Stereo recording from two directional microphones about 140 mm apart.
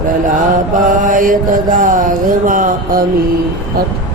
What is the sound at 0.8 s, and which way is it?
Speech, 70° right (ahead or behind).